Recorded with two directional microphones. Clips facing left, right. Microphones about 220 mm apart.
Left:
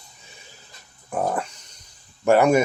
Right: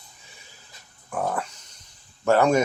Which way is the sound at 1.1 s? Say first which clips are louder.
Left 3 dB; 20° left (ahead or behind).